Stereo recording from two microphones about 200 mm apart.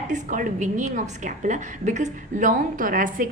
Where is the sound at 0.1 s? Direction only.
40° right (ahead or behind).